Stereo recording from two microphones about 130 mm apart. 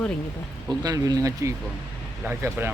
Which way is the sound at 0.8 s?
30° right (ahead or behind).